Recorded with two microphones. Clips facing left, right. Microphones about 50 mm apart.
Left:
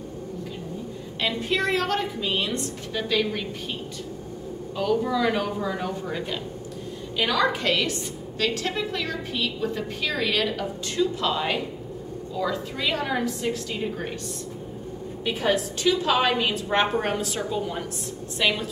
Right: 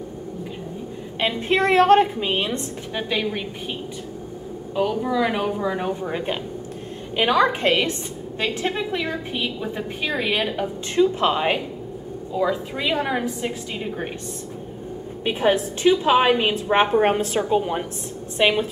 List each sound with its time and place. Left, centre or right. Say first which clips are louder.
1.2 s a woman's voice: right 5 dB; right
4.7 s a woman's voice: right 2 dB; centre
15.2 s a woman's voice: right 4 dB; right
17.0 s a woman's voice: right 7 dB; right